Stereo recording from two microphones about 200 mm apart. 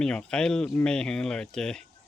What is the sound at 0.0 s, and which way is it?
Speech, 5° left (ahead or behind).